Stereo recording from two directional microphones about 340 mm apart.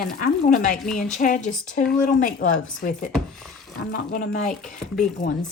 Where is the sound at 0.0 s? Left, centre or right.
Left.